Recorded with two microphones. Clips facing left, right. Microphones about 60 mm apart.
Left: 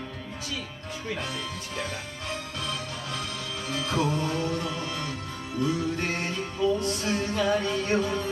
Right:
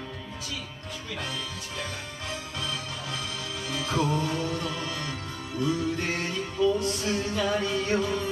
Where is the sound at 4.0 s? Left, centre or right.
Left.